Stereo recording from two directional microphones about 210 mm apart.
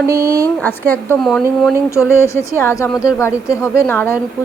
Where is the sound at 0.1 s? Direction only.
15° right (ahead or behind).